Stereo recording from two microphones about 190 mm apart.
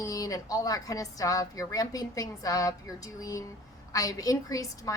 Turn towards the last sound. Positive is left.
turn(degrees=15)  # may be behind; listen again after turning